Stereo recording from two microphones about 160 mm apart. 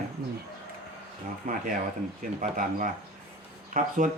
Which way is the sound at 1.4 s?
60° right (ahead or behind).